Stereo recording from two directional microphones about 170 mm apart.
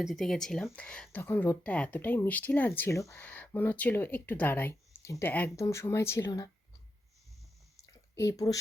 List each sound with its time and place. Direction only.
0.0 s speech: centre (ahead or behind); by 6.5 s 20° left (ahead or behind)
8.1 s speech: 15° left (ahead or behind)